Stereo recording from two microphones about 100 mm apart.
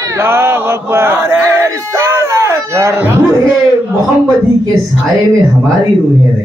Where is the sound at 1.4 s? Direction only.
30° right (ahead or behind).